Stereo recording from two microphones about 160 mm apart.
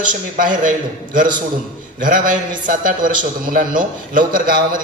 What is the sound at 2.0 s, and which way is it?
A man's voice, 60° right (ahead or behind).